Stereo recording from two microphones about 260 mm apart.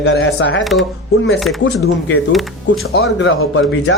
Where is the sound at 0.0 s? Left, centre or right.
Left.